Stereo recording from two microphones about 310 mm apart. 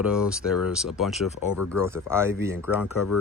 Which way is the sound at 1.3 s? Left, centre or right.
Left.